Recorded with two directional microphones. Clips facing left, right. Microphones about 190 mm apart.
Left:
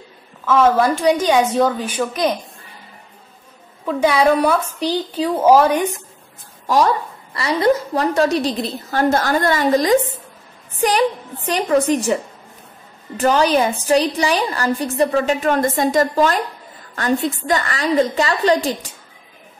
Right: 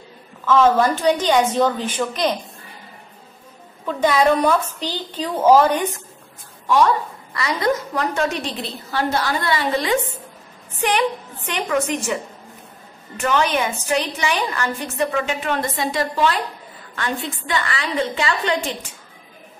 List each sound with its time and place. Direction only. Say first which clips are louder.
0.5 s a woman's voice: left 1 dB; 10° left (ahead or behind)
3.8 s a woman's voice: left 2 dB; 10° left (ahead or behind)
6.7 s a woman's voice: left 1 dB; 35° left (ahead or behind)
13.2 s a woman's voice: left 5 dB; 35° left (ahead or behind)
17.5 s a woman's voice: left 5 dB; 45° left (ahead or behind)